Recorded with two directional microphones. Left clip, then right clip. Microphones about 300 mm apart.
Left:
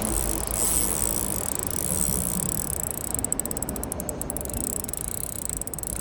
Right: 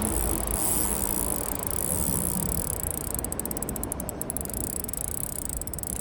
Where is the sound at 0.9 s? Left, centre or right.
Centre.